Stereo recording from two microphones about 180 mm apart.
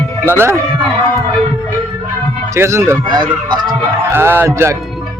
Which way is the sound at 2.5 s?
15° right (ahead or behind).